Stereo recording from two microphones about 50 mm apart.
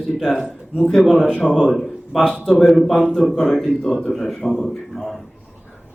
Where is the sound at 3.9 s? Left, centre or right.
Centre.